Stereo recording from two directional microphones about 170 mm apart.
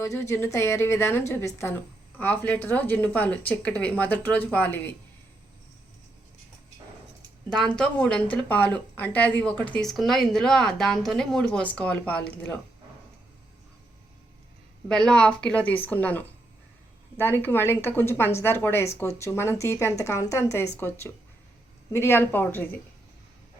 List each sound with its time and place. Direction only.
0.0 s speech: 15° left (ahead or behind)
7.8 s speech: 5° left (ahead or behind)
14.8 s speech: 5° left (ahead or behind)